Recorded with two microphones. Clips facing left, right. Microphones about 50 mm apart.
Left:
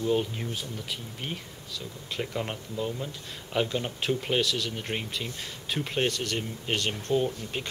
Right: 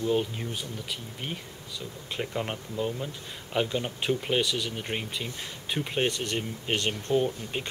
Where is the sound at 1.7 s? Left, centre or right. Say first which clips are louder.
Even; centre.